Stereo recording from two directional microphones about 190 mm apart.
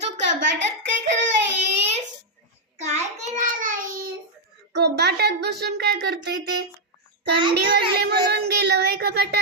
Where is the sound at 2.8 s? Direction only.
40° right (ahead or behind).